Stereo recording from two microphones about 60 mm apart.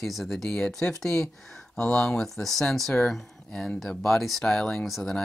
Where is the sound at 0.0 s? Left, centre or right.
Centre.